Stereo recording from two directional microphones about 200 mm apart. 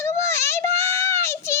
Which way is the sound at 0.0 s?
15° left (ahead or behind).